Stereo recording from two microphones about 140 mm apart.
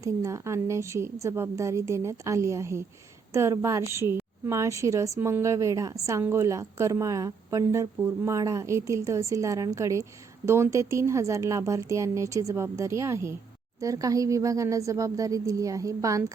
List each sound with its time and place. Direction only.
0.0 s a woman's voice: 20° right (ahead or behind)